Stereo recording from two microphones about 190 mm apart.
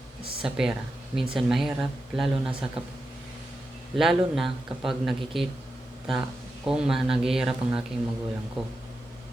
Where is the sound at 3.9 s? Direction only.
Centre (ahead or behind).